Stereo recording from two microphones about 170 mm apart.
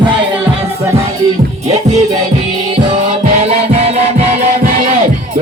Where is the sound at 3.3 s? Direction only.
35° right (ahead or behind).